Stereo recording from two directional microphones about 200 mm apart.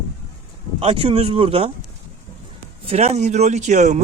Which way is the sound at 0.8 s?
30° right (ahead or behind).